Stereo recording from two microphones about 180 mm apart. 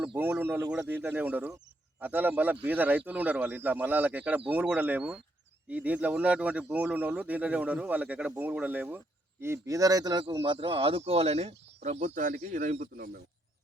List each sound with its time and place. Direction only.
0.0 s speech: 10° right (ahead or behind); by 13.1 s 50° right (ahead or behind)